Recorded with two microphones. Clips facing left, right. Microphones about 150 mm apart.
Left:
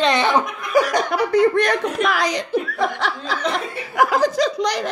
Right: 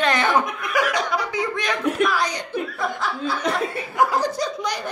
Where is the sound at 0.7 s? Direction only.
35° left (ahead or behind).